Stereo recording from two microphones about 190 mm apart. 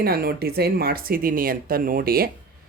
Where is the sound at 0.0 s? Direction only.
55° right (ahead or behind).